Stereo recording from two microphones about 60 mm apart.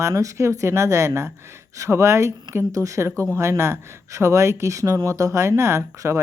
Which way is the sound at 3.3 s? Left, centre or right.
Right.